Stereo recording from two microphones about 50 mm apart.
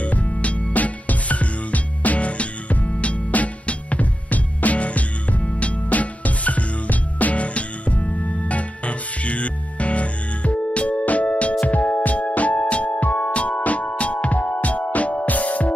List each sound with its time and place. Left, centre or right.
0.0 s music: left